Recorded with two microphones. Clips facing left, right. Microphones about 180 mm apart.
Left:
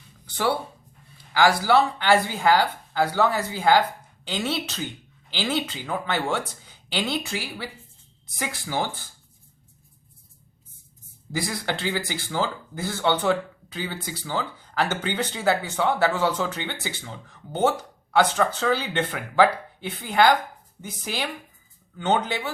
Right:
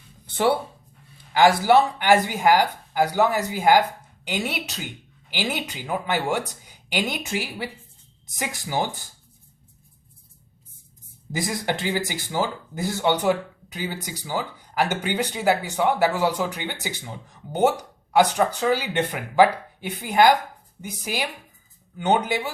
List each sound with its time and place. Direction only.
0.3 s a sound: 25° right (ahead or behind)
1.3 s speech: 20° right (ahead or behind)
11.3 s speech: 20° right (ahead or behind)